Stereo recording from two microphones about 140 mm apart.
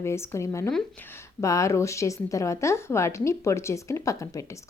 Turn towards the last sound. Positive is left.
turn(degrees=25)  # may be behind; listen again after turning